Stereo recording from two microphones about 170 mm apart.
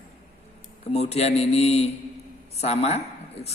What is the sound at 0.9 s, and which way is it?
A man's voice, 40° left (ahead or behind).